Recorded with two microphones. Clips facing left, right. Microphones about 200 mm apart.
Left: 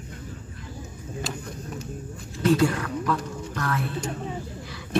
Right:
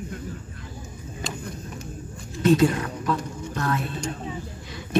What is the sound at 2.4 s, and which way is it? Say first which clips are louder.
Speech: right 2 dB; 25° right (ahead or behind).